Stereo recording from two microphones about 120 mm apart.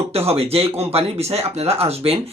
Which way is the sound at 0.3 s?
55° right (ahead or behind).